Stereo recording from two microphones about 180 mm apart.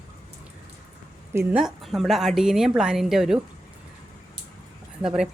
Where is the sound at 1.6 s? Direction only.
Centre (ahead or behind).